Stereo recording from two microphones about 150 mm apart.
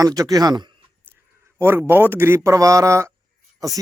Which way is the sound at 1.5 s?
15° right (ahead or behind).